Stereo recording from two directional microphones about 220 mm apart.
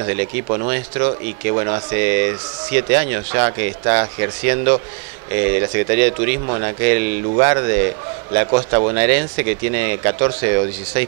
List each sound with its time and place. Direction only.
0.7 s speech: 20° right (ahead or behind)
6.4 s speech: 25° right (ahead or behind)
6.8 s speech: 15° right (ahead or behind)